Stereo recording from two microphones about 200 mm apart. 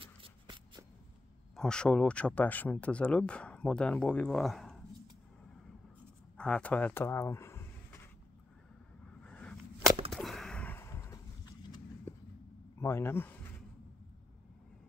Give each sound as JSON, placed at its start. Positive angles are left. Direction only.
{"t": 0.0, "sound": "shuffling cards", "side_deg": -25}
{"t": 1.5, "sound": "speech", "side_deg": 5}
{"t": 6.3, "sound": "a sound", "side_deg": 5}
{"t": 9.2, "sound": "a sound", "side_deg": 5}
{"t": 12.1, "sound": "vehicle", "side_deg": 15}
{"t": 12.7, "sound": "speech", "side_deg": 15}